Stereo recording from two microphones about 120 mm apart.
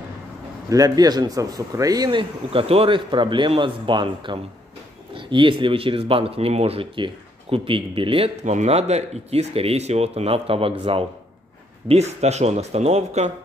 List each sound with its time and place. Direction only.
0.7 s a man's voice: 30° right (ahead or behind); by 8.3 s 45° right (ahead or behind)
8.5 s speech: 65° right (ahead or behind); by 11.1 s 50° right (ahead or behind)
11.9 s speech: 65° right (ahead or behind)